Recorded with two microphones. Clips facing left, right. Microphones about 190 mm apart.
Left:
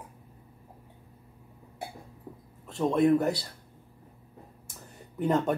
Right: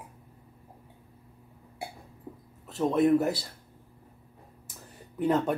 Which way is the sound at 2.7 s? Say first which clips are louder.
Even; centre (ahead or behind).